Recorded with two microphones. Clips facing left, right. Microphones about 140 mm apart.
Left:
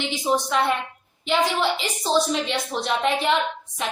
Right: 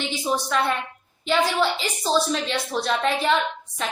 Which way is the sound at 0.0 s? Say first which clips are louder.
Left 2 dB; 20° left (ahead or behind).